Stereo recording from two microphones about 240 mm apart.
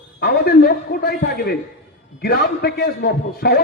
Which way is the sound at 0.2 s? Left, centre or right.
Left.